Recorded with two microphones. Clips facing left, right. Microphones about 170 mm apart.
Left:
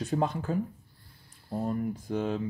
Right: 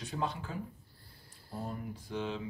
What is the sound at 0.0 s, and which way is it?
Speech, 45° left (ahead or behind).